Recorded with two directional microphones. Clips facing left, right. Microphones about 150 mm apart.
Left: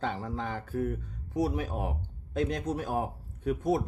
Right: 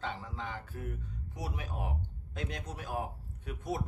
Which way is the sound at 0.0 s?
45° left (ahead or behind).